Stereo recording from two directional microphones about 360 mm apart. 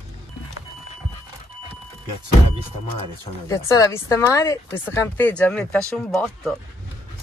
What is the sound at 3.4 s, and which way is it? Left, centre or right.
Speech, centre.